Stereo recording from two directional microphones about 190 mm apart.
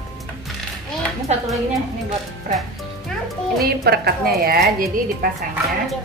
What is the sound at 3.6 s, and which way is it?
A woman's voice, 55° right (ahead or behind).